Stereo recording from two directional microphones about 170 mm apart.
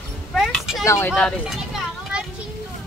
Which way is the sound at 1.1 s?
5° left (ahead or behind).